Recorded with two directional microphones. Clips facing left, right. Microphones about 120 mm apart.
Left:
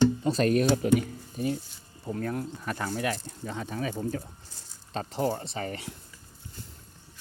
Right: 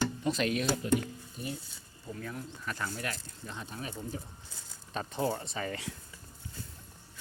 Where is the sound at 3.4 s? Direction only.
75° left (ahead or behind).